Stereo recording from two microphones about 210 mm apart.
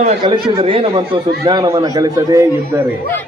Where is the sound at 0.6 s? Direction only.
25° right (ahead or behind).